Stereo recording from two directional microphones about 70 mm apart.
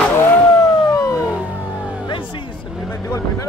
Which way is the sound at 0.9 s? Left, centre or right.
Left.